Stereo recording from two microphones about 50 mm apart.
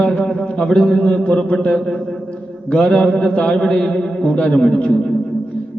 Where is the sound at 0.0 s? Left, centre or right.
Centre.